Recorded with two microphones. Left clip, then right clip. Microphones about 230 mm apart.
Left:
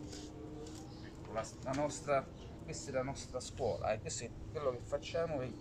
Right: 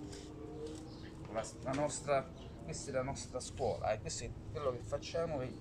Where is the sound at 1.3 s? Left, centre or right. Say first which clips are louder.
Even; centre.